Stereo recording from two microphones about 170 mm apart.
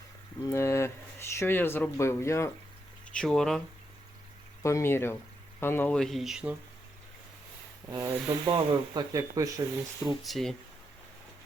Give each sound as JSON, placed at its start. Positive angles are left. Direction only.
{"t": 0.4, "sound": "speech", "side_deg": 15}
{"t": 3.1, "sound": "speech", "side_deg": 5}
{"t": 4.6, "sound": "speech", "side_deg": 15}
{"t": 7.9, "sound": "speech", "side_deg": -20}
{"t": 10.2, "sound": "speech", "side_deg": 0}